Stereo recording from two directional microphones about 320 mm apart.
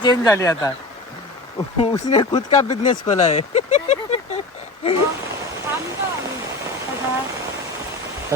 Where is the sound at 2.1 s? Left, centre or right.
Centre.